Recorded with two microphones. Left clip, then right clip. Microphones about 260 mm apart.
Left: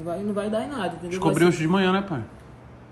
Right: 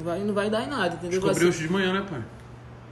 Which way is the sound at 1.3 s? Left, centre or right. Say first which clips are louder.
Left 5 dB; centre.